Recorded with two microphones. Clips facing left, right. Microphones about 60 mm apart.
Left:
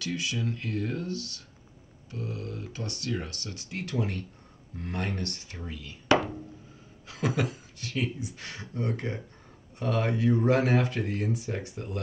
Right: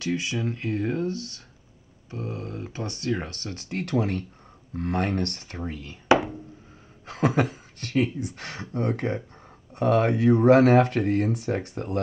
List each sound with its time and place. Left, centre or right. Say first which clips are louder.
0.0 s speech: right 4 dB; right
7.1 s speech: right 6 dB; right